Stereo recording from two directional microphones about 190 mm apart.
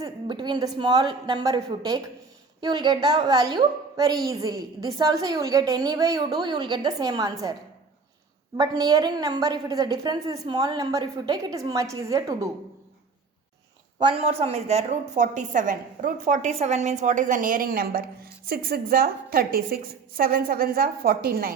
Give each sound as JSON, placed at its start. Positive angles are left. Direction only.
{"t": 0.0, "sound": "a woman's voice", "side_deg": -25}
{"t": 8.5, "sound": "a woman's voice", "side_deg": -20}
{"t": 14.0, "sound": "a woman's voice", "side_deg": -30}